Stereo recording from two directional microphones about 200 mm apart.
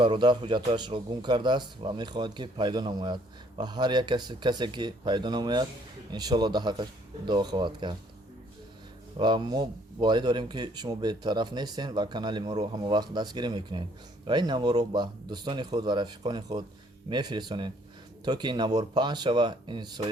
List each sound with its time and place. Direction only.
0.0 s speech: 25° right (ahead or behind)
9.1 s speech: 20° right (ahead or behind)